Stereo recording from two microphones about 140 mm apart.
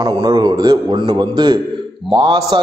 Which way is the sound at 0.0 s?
30° right (ahead or behind).